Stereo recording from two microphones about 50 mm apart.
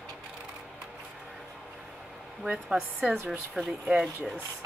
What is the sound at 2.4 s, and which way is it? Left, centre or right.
Speech, centre.